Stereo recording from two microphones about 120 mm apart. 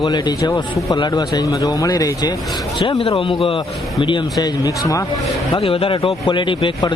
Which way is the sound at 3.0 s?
45° left (ahead or behind).